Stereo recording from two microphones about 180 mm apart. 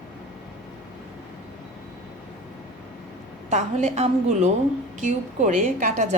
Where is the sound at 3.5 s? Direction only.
40° right (ahead or behind).